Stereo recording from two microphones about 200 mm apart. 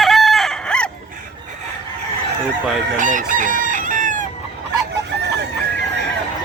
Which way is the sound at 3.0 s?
40° right (ahead or behind).